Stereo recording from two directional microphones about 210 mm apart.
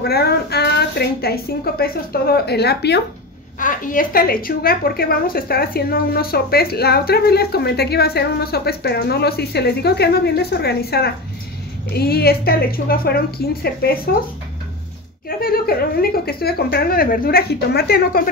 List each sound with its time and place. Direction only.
0.0 s a woman's voice: 50° left (ahead or behind)
3.5 s a woman's voice: 40° left (ahead or behind)
15.2 s a woman's voice: 45° left (ahead or behind)